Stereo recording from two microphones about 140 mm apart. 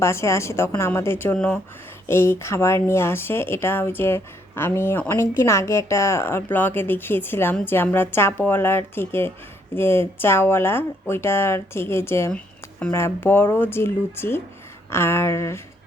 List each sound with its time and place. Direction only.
0.0 s a woman's voice: 20° left (ahead or behind)